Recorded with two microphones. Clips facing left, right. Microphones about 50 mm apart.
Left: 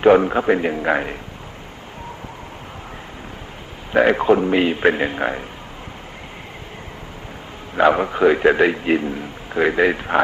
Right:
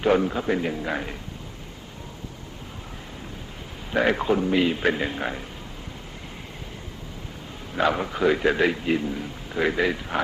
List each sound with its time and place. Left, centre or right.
0.0 s a man's voice: left
3.9 s a man's voice: left
7.8 s a man's voice: left